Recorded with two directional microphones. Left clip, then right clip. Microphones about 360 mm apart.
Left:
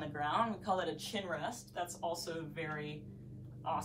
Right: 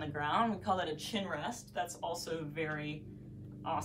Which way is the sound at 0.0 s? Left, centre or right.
Centre.